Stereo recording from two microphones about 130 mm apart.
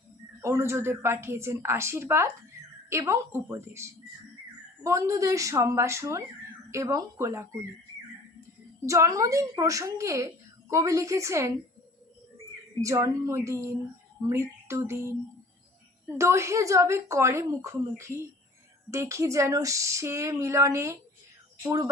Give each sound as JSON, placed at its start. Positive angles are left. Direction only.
{"t": 0.4, "sound": "speech", "side_deg": -20}
{"t": 8.9, "sound": "speech", "side_deg": -25}
{"t": 12.8, "sound": "speech", "side_deg": -25}
{"t": 14.2, "sound": "a sound", "side_deg": -20}
{"t": 16.1, "sound": "speech", "side_deg": -20}